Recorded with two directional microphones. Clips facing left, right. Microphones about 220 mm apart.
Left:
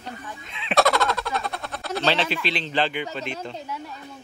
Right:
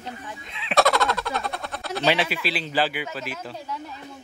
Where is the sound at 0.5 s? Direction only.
Centre (ahead or behind).